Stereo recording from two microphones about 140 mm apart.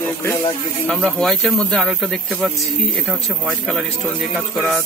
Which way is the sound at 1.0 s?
Centre (ahead or behind).